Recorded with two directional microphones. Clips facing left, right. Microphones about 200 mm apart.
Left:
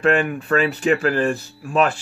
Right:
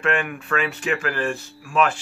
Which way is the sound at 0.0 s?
35° left (ahead or behind).